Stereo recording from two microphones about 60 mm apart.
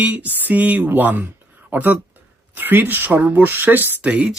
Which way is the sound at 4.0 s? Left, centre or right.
Right.